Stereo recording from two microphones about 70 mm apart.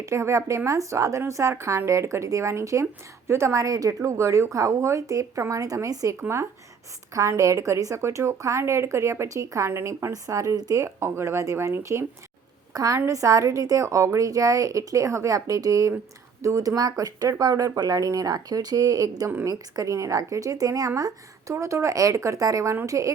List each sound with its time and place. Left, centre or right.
0.0 s speech: right
4.0 s speech: right
6.1 s speech: right
7.1 s speech: right
10.1 s speech: right
10.8 s speech: right
12.7 s a woman's voice: right